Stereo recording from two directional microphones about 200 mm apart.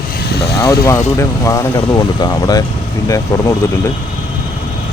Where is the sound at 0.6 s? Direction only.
15° left (ahead or behind).